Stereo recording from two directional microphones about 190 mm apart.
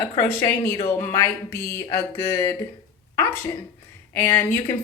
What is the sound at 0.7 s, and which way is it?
Speech, 35° left (ahead or behind).